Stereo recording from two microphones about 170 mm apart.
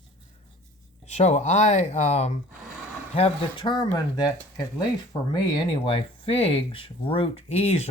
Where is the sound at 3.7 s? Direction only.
25° left (ahead or behind).